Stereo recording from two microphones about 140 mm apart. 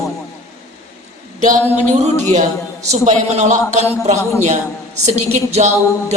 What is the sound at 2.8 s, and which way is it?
A man's voice, 55° right (ahead or behind).